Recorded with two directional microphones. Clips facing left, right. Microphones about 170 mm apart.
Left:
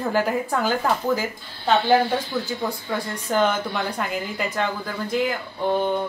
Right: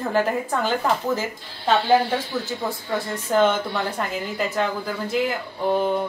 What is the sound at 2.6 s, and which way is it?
A woman's voice, centre (ahead or behind).